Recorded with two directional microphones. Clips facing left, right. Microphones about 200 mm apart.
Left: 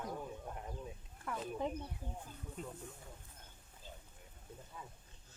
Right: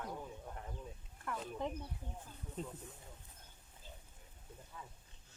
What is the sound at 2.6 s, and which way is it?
Speech, 30° right (ahead or behind).